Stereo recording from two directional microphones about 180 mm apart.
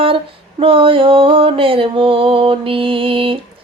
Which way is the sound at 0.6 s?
30° right (ahead or behind).